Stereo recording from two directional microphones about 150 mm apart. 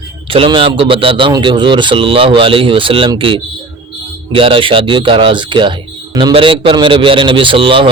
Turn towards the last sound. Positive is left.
turn(degrees=-35)  # may be behind; listen again after turning